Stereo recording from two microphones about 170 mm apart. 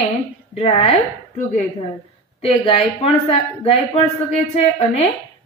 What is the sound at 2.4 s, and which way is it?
A woman's voice, 35° left (ahead or behind).